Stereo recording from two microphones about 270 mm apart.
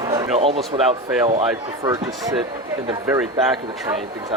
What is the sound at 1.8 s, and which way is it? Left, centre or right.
Speech, centre.